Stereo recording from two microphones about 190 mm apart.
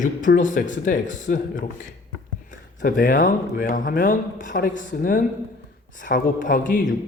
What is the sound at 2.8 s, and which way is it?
Speech, 45° left (ahead or behind).